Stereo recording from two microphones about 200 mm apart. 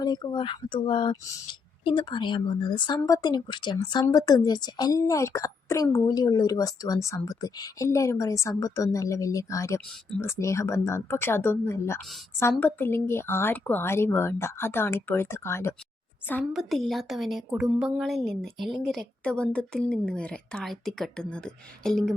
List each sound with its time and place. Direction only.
0.0 s speech: 20° left (ahead or behind)
16.5 s a woman's voice: centre (ahead or behind)